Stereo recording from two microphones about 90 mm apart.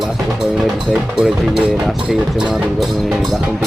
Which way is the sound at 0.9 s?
5° right (ahead or behind).